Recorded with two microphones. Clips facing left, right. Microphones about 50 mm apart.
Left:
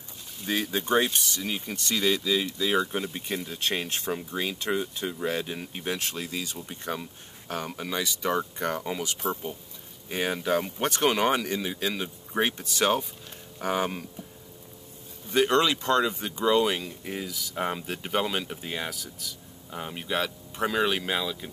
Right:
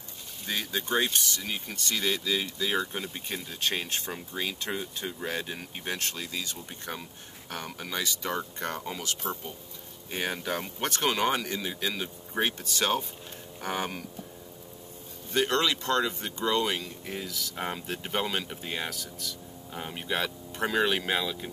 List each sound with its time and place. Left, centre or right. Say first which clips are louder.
0.5 s speech: left 4 dB; centre
5.9 s speech: left 2 dB; centre
6.7 s speech: left 5 dB; centre
7.4 s speech: left 5 dB; centre
9.2 s speech: left 4 dB; centre
15.3 s speech: left 4 dB; centre